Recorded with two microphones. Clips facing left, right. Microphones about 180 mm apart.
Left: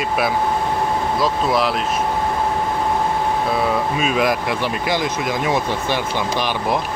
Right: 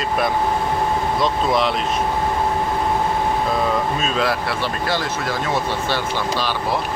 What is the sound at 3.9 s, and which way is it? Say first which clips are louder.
Speech: left 2 dB; 10° left (ahead or behind).